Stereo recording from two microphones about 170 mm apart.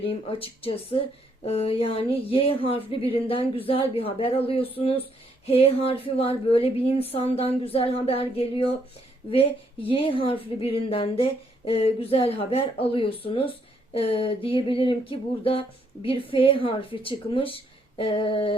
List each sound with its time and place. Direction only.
0.0 s music: 35° left (ahead or behind)